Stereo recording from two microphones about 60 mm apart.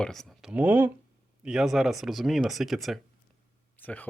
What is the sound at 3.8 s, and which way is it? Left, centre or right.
Speech, left.